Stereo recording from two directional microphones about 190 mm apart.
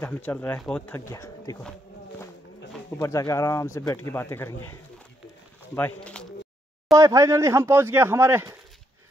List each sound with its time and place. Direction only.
0.0 s speech: 10° left (ahead or behind)
1.6 s a sound: 5° left (ahead or behind)
3.0 s speech: 15° left (ahead or behind)
5.8 s speech: 10° left (ahead or behind)
7.0 s speech: 15° right (ahead or behind)